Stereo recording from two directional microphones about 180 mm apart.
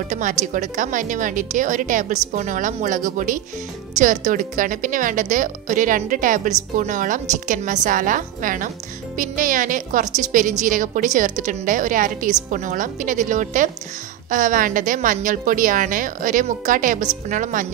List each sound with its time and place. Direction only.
0.1 s a woman's voice: 45° right (ahead or behind)